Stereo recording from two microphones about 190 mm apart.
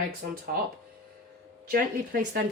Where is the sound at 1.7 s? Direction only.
50° right (ahead or behind).